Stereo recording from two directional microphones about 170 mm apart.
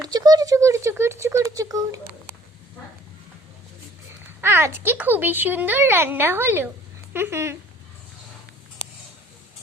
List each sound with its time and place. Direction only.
0.1 s speech: 20° right (ahead or behind)
4.4 s speech: 15° right (ahead or behind)